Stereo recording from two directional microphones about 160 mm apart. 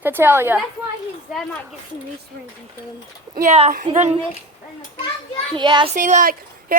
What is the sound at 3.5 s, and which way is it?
Speech, 45° right (ahead or behind).